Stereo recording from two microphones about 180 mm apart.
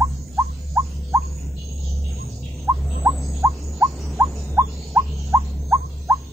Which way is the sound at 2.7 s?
15° right (ahead or behind).